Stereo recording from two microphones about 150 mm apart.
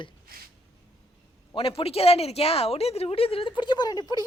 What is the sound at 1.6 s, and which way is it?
Speech, 40° left (ahead or behind).